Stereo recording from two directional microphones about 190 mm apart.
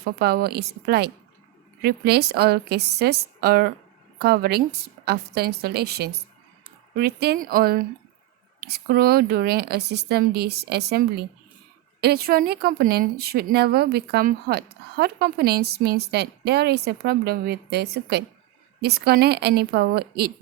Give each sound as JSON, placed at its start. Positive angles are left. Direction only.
{"t": 0.0, "sound": "a woman's voice", "side_deg": -55}